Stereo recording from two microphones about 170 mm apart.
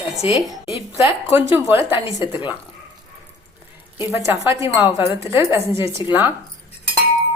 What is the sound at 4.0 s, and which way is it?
Speech, 15° right (ahead or behind).